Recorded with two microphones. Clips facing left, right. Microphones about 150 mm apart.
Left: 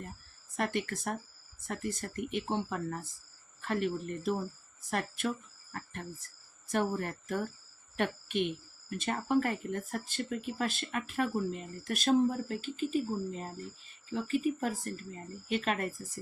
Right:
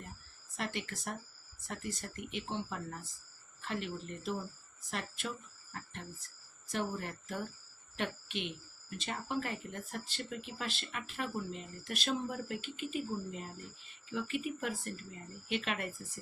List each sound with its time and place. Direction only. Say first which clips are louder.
0.5 s speech: left 7 dB; 55° left (ahead or behind)
5.7 s a sound: left 4 dB; 50° left (ahead or behind)
6.7 s speech: left 6 dB; 50° left (ahead or behind)